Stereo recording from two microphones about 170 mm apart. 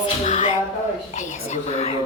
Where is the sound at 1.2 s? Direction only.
45° left (ahead or behind).